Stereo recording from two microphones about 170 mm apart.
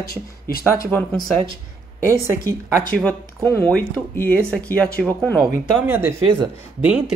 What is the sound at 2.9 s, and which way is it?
Speech, 5° left (ahead or behind).